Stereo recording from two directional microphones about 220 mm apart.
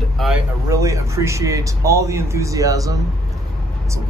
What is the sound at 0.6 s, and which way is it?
A man's voice, 15° right (ahead or behind).